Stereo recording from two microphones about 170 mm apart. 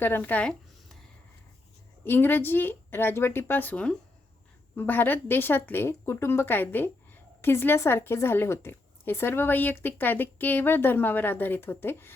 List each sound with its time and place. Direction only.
0.0 s speech: 10° left (ahead or behind)
2.0 s a woman's voice: 10° left (ahead or behind)